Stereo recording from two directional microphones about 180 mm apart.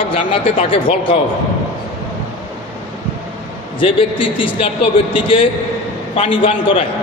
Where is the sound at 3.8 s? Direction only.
30° left (ahead or behind).